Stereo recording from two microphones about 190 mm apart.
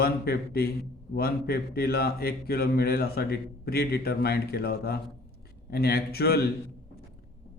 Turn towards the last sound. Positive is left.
turn(degrees=55)  # may be behind; listen again after turning